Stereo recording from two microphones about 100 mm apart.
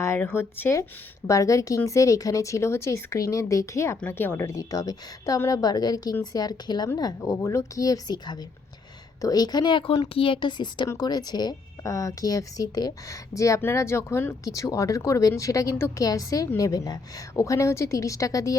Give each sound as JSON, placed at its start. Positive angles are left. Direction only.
{"t": 0.2, "sound": "speech", "side_deg": 20}
{"t": 1.3, "sound": "speech", "side_deg": 35}
{"t": 11.8, "sound": "speech", "side_deg": 30}